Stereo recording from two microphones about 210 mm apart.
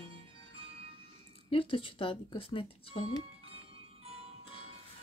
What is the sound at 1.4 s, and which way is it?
Speech, 25° left (ahead or behind).